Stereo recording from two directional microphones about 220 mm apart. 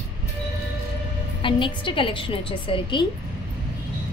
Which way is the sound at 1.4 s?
20° left (ahead or behind).